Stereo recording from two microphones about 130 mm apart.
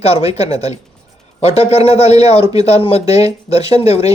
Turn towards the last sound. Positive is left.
turn(degrees=55)  # may be behind; listen again after turning